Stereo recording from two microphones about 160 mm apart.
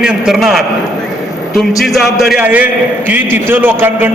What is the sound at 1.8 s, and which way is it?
A man's voice, centre (ahead or behind).